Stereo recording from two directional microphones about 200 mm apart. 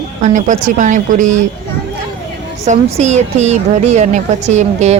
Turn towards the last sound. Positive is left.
turn(degrees=-35)  # may be behind; listen again after turning